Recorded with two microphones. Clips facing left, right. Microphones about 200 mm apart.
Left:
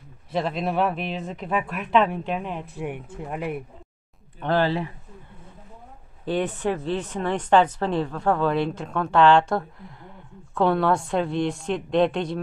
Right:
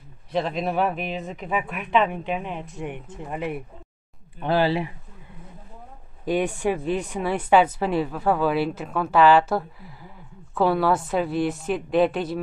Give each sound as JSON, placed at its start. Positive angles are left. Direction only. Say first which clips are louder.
{"t": 0.3, "sound": "speech", "louder": "right 1 dB", "side_deg": 0}
{"t": 4.4, "sound": "speech", "louder": "right 1 dB", "side_deg": -10}
{"t": 6.2, "sound": "speech", "louder": "right 2 dB", "side_deg": -10}